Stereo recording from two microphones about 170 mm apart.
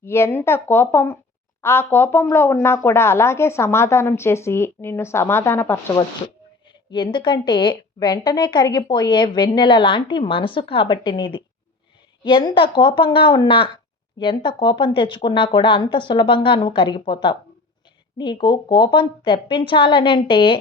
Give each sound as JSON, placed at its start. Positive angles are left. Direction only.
{"t": 0.0, "sound": "a woman's voice", "side_deg": 15}